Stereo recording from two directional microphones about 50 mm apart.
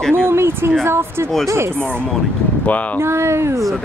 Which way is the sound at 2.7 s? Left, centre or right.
Left.